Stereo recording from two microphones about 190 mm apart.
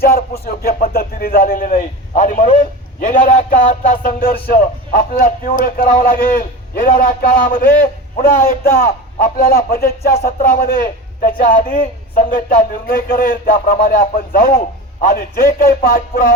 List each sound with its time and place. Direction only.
0.0 s a man's voice: 50° left (ahead or behind)